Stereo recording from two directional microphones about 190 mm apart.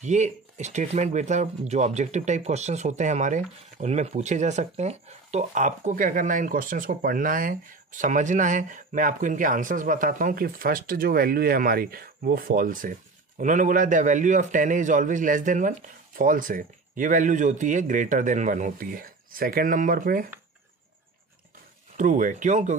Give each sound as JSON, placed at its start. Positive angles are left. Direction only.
{"t": 0.0, "sound": "speech", "side_deg": -40}
{"t": 21.9, "sound": "speech", "side_deg": -45}